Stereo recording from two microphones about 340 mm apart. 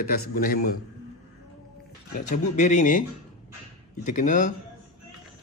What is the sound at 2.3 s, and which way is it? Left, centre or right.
Speech, left.